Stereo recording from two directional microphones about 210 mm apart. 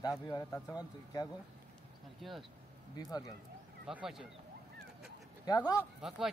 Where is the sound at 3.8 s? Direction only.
Centre (ahead or behind).